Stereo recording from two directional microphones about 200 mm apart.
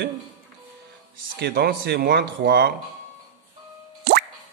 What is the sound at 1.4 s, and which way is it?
Speech, 50° right (ahead or behind).